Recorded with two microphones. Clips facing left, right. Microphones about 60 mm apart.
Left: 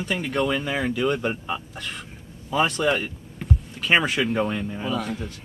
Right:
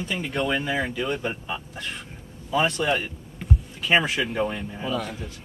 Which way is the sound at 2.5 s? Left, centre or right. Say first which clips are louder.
Left 1 dB; left.